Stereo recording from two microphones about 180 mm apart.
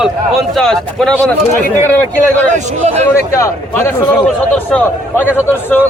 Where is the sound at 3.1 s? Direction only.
15° left (ahead or behind).